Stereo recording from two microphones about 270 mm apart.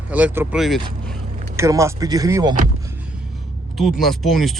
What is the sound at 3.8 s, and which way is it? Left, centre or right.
Speech, centre.